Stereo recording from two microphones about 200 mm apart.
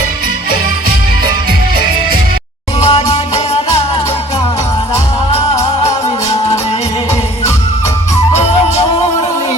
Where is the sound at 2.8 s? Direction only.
30° left (ahead or behind).